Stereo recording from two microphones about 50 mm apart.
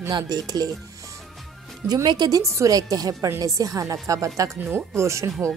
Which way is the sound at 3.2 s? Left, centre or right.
Right.